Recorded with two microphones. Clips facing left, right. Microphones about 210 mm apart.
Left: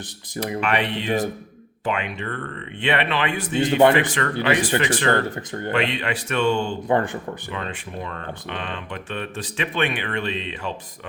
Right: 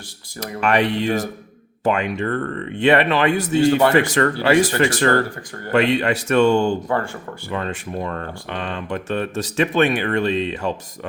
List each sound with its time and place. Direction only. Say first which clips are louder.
0.6 s speech: right 8 dB; 45° right (ahead or behind)
6.8 s speech: left 2 dB; 20° left (ahead or behind)
7.5 s speech: right 10 dB; 45° right (ahead or behind)